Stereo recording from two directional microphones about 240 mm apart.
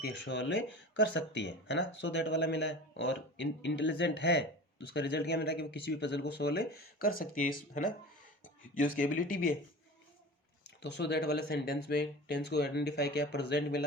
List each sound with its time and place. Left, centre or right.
0.0 s speech: left
10.8 s speech: left